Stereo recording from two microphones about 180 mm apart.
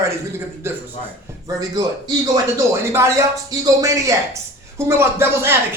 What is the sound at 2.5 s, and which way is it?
Speech, 15° right (ahead or behind).